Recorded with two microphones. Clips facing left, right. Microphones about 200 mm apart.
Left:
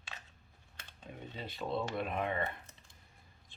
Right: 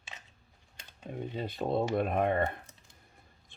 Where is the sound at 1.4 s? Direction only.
45° right (ahead or behind).